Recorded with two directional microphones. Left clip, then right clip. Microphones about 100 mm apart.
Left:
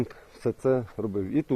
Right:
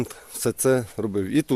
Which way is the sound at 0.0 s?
55° right (ahead or behind).